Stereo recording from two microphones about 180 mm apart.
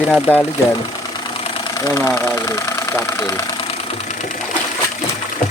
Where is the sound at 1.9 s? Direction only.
15° left (ahead or behind).